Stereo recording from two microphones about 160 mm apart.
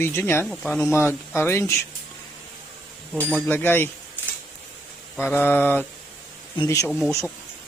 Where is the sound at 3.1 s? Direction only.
10° left (ahead or behind).